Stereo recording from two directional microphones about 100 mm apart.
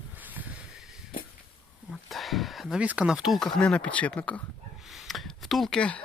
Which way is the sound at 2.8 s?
10° right (ahead or behind).